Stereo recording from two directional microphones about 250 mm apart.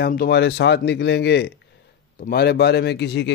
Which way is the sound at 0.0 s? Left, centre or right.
Left.